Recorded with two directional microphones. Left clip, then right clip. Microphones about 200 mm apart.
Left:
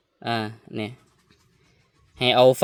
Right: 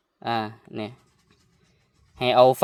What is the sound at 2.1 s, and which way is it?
Speech, 35° left (ahead or behind).